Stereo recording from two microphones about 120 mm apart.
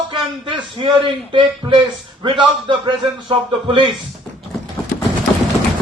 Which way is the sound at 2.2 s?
40° right (ahead or behind).